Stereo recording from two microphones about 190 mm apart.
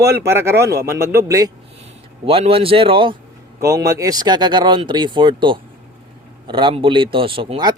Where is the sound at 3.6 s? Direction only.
15° right (ahead or behind).